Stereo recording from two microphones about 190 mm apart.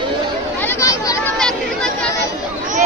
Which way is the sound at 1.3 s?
5° left (ahead or behind).